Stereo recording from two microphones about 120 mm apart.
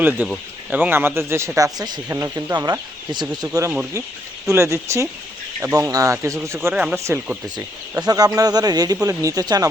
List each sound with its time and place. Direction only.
0.0 s a man's voice: 15° right (ahead or behind)
8.0 s a man's voice: 30° right (ahead or behind)